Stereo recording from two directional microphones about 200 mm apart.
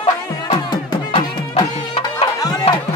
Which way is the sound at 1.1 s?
30° left (ahead or behind).